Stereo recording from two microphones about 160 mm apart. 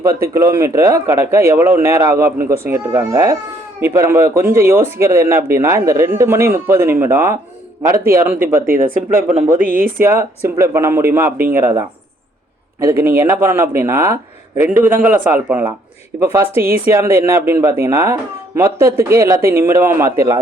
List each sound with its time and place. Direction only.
0.3 s a man's voice: 20° right (ahead or behind)
9.6 s speech: 60° right (ahead or behind)
10.0 s speech: 15° right (ahead or behind)